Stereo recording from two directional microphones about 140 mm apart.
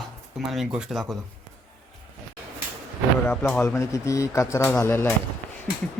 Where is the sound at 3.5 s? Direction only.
15° left (ahead or behind).